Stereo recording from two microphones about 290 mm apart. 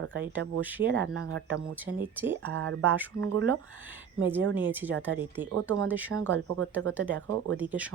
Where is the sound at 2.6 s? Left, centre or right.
Right.